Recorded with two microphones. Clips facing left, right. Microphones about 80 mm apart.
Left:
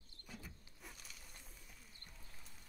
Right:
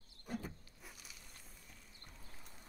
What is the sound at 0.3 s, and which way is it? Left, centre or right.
Power windows, right.